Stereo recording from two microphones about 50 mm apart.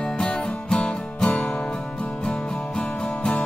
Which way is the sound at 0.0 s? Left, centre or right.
Centre.